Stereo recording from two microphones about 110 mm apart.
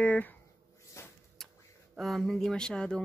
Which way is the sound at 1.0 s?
25° left (ahead or behind).